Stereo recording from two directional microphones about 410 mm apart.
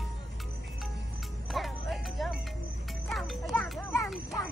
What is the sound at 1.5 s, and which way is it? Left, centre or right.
Music, centre.